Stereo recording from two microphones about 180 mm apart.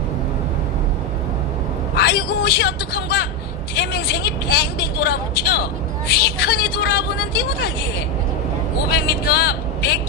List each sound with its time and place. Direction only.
2.0 s vehicle: 65° left (ahead or behind)
3.7 s a woman's voice: 65° left (ahead or behind)
8.9 s a woman's voice: 65° left (ahead or behind)